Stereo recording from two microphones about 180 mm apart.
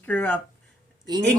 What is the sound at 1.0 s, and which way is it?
Speech, 25° right (ahead or behind).